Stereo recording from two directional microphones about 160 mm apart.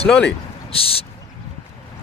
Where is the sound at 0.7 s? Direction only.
35° left (ahead or behind).